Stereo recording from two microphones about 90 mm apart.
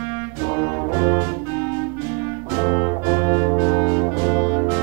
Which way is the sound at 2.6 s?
30° right (ahead or behind).